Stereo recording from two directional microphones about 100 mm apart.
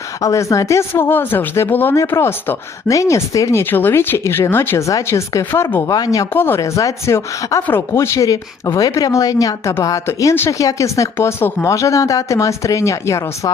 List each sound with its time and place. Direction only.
0.2 s speech: 30° left (ahead or behind)
3.6 s speech: 20° left (ahead or behind)
5.9 s speech: 40° left (ahead or behind)
6.3 s speech: 20° left (ahead or behind)
6.6 s speech: 35° left (ahead or behind)